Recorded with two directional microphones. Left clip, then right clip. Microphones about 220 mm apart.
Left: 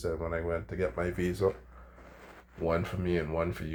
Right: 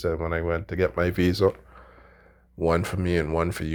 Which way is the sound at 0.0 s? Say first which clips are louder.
Right 7 dB; 45° right (ahead or behind).